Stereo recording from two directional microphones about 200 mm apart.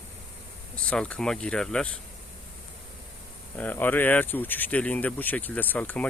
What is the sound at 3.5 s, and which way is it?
Speech, 10° left (ahead or behind).